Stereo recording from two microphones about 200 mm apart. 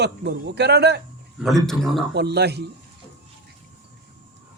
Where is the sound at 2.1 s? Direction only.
55° right (ahead or behind).